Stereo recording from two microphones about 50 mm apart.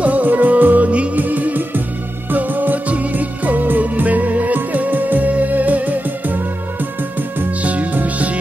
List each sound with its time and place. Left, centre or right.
0.0 s music: right
7.6 s music: right